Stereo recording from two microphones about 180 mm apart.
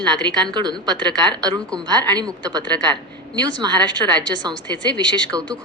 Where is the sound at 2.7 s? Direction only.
25° right (ahead or behind).